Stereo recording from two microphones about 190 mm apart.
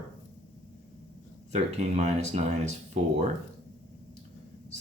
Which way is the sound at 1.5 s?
35° right (ahead or behind).